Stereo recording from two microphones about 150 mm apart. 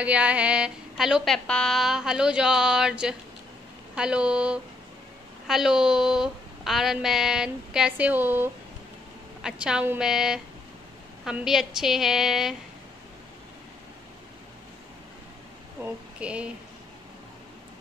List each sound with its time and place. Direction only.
0.0 s a woman's voice: 10° right (ahead or behind)
15.8 s speech: 5° right (ahead or behind)